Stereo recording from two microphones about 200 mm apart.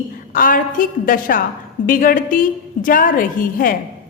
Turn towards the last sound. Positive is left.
turn(degrees=45)  # may be behind; listen again after turning